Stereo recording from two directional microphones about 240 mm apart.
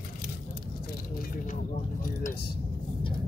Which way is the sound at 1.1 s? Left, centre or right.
Left.